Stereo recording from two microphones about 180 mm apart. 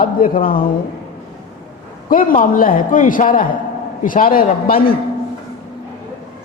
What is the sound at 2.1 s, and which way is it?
A man's voice, 50° left (ahead or behind).